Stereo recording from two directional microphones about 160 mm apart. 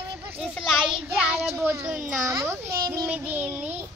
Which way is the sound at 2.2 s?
15° right (ahead or behind).